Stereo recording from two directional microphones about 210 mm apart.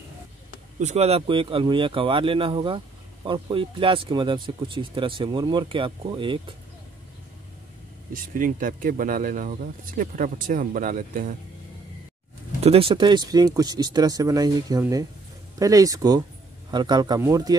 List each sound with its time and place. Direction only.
0.7 s speech: 30° right (ahead or behind)
8.1 s speech: 40° right (ahead or behind)
12.6 s speech: 25° right (ahead or behind)